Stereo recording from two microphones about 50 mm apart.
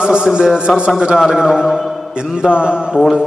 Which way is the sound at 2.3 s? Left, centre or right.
Centre.